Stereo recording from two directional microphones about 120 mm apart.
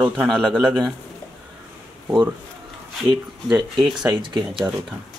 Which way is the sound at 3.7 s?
5° right (ahead or behind).